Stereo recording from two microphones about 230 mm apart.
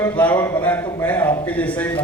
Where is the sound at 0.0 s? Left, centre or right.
Centre.